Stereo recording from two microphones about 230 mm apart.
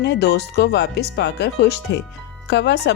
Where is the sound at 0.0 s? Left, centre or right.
Left.